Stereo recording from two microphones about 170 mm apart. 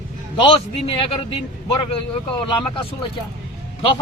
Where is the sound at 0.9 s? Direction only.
30° left (ahead or behind).